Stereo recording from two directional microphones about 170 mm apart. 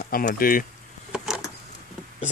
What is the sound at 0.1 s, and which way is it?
Speech, 60° left (ahead or behind).